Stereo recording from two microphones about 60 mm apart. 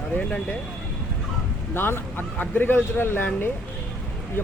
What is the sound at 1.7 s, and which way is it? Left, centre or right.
Speech, left.